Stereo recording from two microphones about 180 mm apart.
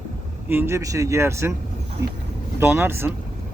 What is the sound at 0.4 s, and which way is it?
Speech, 10° right (ahead or behind).